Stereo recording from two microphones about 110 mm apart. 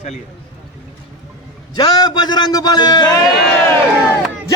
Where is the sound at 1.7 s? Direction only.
35° left (ahead or behind).